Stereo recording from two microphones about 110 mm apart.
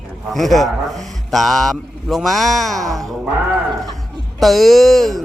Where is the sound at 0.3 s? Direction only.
Centre (ahead or behind).